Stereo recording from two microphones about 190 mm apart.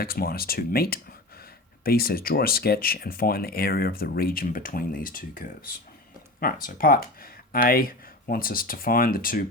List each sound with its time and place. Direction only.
0.0 s speech: 50° left (ahead or behind)